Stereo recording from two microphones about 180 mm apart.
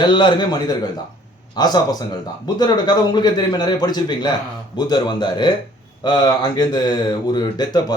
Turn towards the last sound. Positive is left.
turn(degrees=25)  # may be behind; listen again after turning